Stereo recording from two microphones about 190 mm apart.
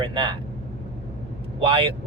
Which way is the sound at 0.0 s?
25° right (ahead or behind).